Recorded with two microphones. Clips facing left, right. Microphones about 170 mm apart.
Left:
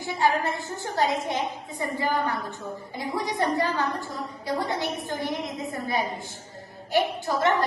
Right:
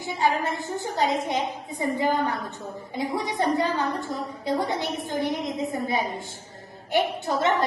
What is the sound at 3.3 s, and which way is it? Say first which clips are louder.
A woman's voice: right 1 dB; 20° right (ahead or behind).